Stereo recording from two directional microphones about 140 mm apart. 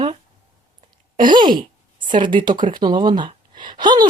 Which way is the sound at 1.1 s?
35° right (ahead or behind).